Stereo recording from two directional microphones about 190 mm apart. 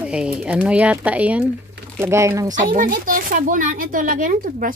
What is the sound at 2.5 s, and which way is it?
Speech, 45° right (ahead or behind).